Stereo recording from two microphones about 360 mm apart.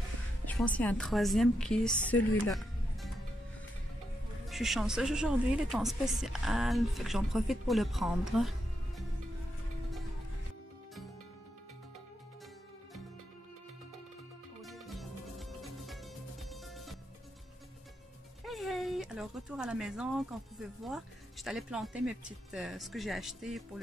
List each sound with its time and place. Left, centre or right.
0.5 s speech: centre
4.5 s speech: centre
14.6 s music: centre
16.4 s music: centre
18.4 s speech: centre